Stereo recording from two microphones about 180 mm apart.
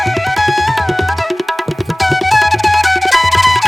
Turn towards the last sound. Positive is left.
turn(degrees=0)  # may be behind; listen again after turning